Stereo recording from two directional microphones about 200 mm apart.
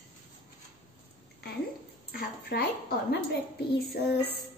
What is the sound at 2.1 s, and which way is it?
A woman's voice, 50° left (ahead or behind).